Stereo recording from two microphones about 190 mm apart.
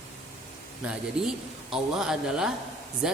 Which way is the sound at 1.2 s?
5° right (ahead or behind).